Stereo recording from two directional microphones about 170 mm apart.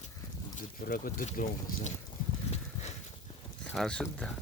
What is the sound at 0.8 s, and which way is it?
Speech, 55° left (ahead or behind).